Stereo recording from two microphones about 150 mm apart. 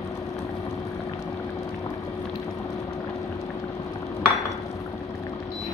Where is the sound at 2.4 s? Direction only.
20° left (ahead or behind).